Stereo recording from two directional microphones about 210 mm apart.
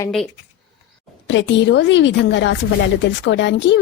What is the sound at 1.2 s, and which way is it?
A woman's voice, 60° left (ahead or behind).